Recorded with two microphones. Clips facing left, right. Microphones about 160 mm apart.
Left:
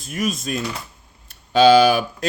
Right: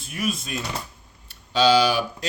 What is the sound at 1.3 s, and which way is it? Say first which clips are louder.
Speech: left 6 dB; 55° left (ahead or behind).